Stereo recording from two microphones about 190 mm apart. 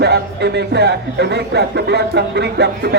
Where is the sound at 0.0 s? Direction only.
60° right (ahead or behind).